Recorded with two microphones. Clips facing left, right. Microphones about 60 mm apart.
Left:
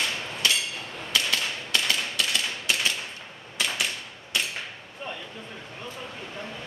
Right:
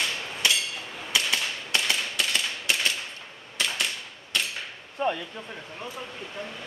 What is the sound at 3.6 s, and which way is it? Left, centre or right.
Typewriter, centre.